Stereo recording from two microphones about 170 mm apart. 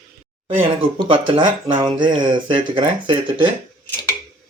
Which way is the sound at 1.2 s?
30° right (ahead or behind).